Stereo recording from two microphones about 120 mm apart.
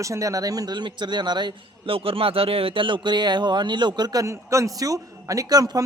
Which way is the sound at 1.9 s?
50° right (ahead or behind).